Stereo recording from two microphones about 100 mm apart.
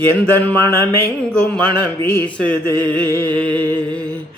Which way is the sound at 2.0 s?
20° left (ahead or behind).